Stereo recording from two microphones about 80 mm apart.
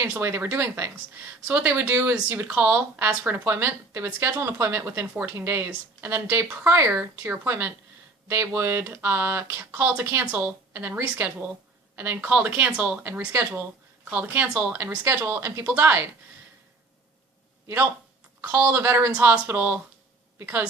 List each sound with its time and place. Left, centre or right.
0.0 s a woman's voice: right
18.6 s a woman's voice: right